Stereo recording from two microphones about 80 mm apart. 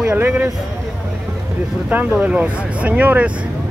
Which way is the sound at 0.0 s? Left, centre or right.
Right.